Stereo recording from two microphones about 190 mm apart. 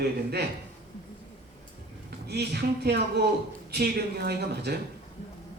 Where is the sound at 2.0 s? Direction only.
60° right (ahead or behind).